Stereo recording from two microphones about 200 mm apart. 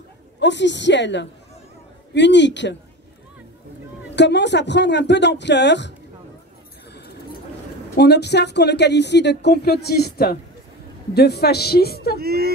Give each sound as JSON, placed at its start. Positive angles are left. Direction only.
{"t": 0.4, "sound": "speech", "side_deg": 60}
{"t": 4.1, "sound": "speech", "side_deg": 60}
{"t": 7.9, "sound": "speech", "side_deg": 55}
{"t": 12.2, "sound": "speech", "side_deg": -50}